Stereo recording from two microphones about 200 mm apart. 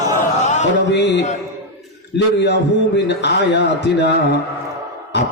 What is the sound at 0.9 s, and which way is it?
Music, 60° left (ahead or behind).